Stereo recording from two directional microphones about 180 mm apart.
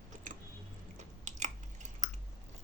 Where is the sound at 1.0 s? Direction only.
40° right (ahead or behind).